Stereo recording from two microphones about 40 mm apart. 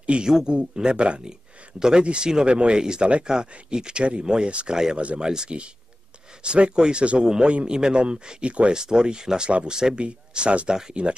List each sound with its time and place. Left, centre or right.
0.0 s speech: right
0.3 s speech: centre
1.8 s speech: centre
8.7 s speech: centre
9.5 s speech: right